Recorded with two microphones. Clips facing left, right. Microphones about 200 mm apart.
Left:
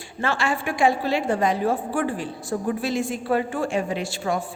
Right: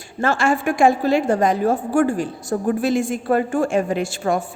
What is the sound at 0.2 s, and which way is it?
A woman's voice, 45° right (ahead or behind).